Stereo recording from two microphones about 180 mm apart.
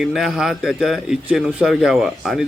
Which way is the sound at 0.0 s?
Centre (ahead or behind).